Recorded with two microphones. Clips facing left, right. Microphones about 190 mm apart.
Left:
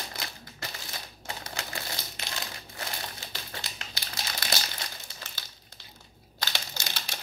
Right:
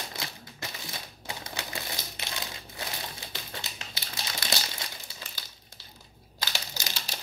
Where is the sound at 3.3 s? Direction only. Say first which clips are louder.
Even; 25° right (ahead or behind).